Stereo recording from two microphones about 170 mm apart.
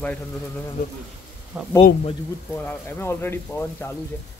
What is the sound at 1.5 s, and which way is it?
Speech, 5° right (ahead or behind).